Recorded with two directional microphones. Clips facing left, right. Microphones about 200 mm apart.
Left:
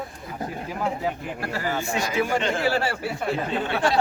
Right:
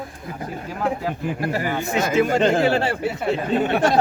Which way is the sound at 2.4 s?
50° right (ahead or behind).